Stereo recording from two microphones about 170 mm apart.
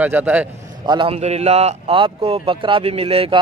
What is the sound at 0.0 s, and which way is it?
Speech, 10° right (ahead or behind).